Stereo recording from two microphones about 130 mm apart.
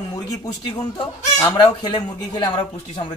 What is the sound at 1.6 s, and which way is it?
Speech, 35° left (ahead or behind).